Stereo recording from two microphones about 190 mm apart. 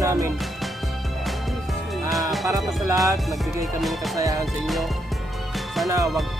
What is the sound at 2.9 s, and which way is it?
Music, centre (ahead or behind).